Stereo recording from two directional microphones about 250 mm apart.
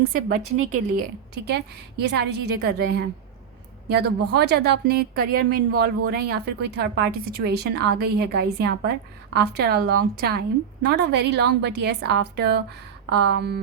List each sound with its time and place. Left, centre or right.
0.5 s a woman's voice: right
0.9 s a woman's voice: right